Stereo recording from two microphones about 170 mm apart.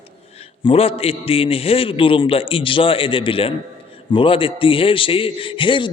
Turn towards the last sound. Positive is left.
turn(degrees=30)  # may be behind; listen again after turning